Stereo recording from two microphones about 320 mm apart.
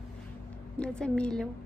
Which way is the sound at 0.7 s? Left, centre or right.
Centre.